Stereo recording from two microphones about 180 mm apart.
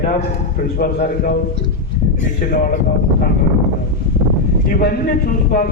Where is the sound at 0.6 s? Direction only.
55° left (ahead or behind).